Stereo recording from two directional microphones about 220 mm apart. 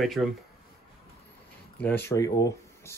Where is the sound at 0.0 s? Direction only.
Centre (ahead or behind).